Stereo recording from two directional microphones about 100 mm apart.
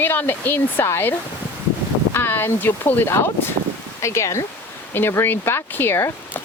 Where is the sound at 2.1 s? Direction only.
25° left (ahead or behind).